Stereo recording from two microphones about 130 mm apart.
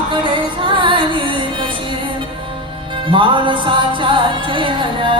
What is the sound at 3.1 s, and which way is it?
Speech, 40° right (ahead or behind).